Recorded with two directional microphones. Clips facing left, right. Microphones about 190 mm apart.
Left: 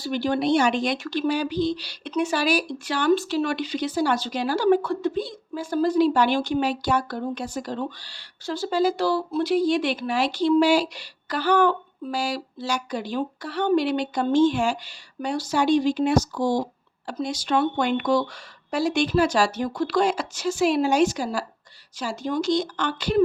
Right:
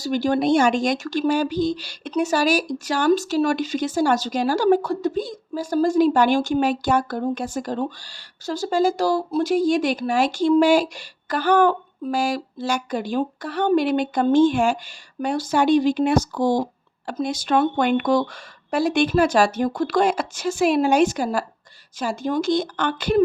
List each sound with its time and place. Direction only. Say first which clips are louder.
0.0 s speech: right 3 dB; 45° right (ahead or behind)